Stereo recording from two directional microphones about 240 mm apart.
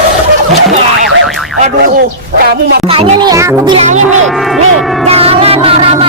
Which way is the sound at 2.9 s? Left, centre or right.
Centre.